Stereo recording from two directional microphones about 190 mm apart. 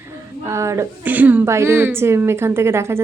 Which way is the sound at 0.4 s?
15° right (ahead or behind).